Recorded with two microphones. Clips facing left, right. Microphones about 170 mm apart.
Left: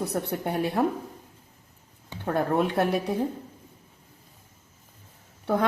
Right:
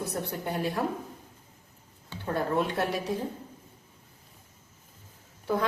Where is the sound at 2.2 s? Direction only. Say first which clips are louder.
Left 4 dB; 55° left (ahead or behind).